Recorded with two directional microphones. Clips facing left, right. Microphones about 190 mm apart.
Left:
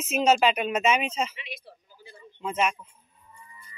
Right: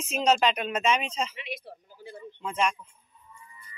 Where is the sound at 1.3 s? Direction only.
60° right (ahead or behind).